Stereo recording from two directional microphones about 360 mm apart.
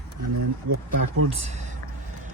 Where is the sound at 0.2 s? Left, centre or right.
Right.